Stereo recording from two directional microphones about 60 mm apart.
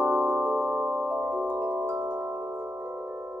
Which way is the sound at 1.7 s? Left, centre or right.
Right.